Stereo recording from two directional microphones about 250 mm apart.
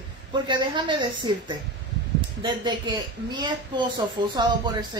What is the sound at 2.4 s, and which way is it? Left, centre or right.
A woman's voice, centre.